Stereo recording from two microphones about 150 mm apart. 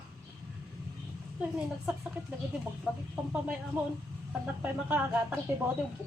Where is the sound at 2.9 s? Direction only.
5° right (ahead or behind).